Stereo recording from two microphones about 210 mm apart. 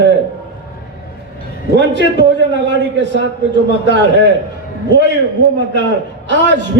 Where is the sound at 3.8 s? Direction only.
55° right (ahead or behind).